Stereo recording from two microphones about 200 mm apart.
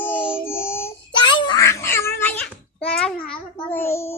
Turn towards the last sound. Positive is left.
turn(degrees=15)  # may be behind; listen again after turning